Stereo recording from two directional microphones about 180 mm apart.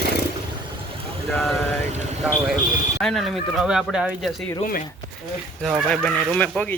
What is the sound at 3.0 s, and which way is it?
Speech, centre (ahead or behind).